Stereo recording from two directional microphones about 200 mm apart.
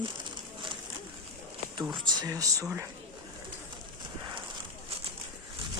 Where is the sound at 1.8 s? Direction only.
20° right (ahead or behind).